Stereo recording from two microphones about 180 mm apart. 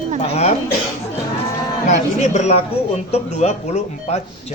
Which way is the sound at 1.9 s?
40° left (ahead or behind).